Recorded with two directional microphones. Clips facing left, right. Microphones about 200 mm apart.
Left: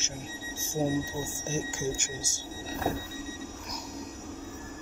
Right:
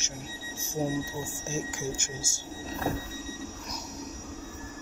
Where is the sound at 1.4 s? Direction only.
30° left (ahead or behind).